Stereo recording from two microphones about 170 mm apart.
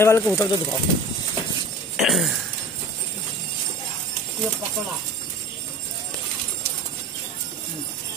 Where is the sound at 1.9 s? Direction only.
Centre (ahead or behind).